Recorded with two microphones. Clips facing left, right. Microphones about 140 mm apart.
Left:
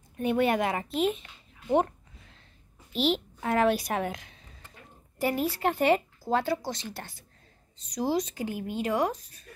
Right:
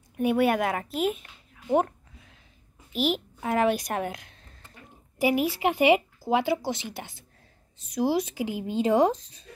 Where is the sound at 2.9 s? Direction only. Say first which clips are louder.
Even; 5° right (ahead or behind).